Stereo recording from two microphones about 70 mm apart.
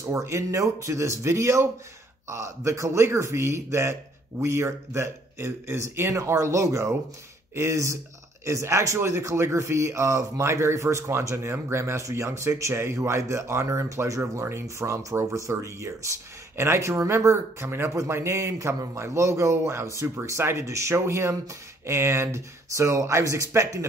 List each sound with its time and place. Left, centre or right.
0.0 s speech: right